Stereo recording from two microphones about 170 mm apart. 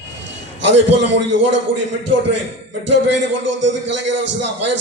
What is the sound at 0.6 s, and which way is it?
A man's voice, 90° right.